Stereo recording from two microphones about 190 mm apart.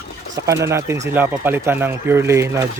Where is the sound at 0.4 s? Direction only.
15° right (ahead or behind).